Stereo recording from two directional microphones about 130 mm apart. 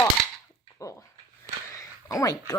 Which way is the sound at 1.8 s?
25° left (ahead or behind).